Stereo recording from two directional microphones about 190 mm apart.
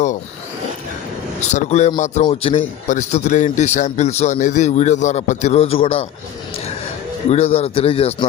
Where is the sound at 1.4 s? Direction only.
35° left (ahead or behind).